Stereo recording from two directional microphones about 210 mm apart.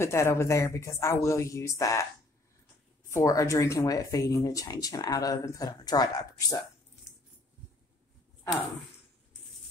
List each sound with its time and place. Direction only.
0.0 s speech: 15° left (ahead or behind)
3.1 s speech: 15° left (ahead or behind)